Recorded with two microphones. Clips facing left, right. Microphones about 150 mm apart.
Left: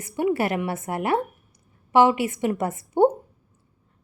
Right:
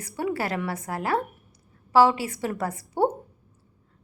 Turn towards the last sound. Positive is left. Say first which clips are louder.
# left 5 dB
turn(degrees=25)  # may be behind; listen again after turning